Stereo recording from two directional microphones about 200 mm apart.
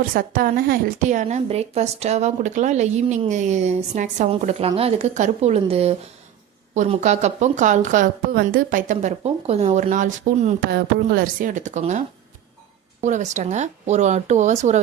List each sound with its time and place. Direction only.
0.0 s a woman's voice: 45° right (ahead or behind)